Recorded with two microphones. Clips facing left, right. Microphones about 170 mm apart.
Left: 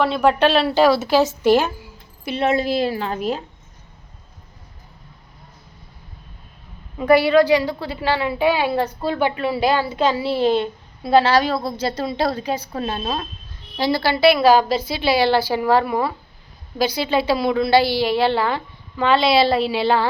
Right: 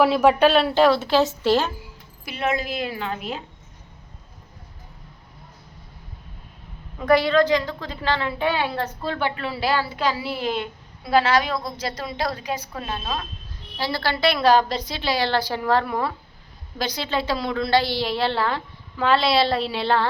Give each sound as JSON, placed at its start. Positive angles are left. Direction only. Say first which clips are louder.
{"t": 0.0, "sound": "a woman's voice", "louder": "right 1 dB", "side_deg": -5}
{"t": 2.2, "sound": "a woman's voice", "louder": "left 6 dB", "side_deg": 30}
{"t": 7.0, "sound": "a woman's voice", "louder": "left 4 dB", "side_deg": 10}
{"t": 13.7, "sound": "a woman's voice", "louder": "left 6 dB", "side_deg": 15}